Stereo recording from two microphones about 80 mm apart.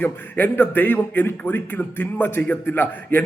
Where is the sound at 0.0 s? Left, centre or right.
Left.